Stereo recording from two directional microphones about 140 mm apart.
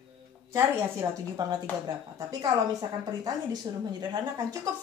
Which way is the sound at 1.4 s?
30° right (ahead or behind).